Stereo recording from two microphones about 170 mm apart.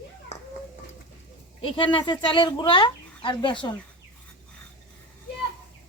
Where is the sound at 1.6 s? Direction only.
30° left (ahead or behind).